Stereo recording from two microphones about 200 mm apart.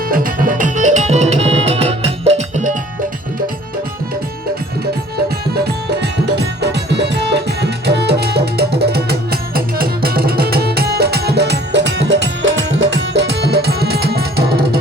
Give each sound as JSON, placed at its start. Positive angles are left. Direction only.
{"t": 0.1, "sound": "music", "side_deg": -45}
{"t": 5.6, "sound": "music", "side_deg": -55}